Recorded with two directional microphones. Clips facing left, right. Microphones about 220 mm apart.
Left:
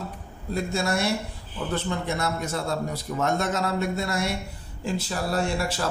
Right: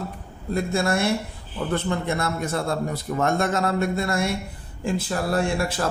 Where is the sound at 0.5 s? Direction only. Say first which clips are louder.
Right 3 dB; 55° right (ahead or behind).